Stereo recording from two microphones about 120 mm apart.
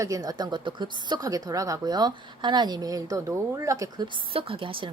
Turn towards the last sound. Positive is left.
turn(degrees=-45)  # may be behind; listen again after turning